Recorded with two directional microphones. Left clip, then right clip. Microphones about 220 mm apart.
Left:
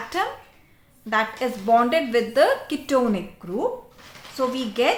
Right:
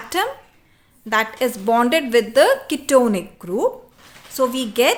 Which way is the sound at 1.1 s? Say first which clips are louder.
Right 4 dB; 50° right (ahead or behind).